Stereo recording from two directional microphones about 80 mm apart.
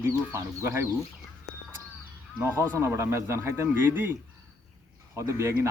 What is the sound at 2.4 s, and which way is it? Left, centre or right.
Speech, right.